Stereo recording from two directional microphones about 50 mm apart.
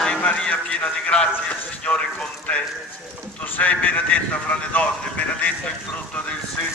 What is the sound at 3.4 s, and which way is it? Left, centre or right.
Speech, left.